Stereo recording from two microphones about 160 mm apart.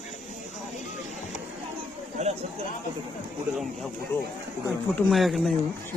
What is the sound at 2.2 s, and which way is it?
Chatter, 45° right (ahead or behind).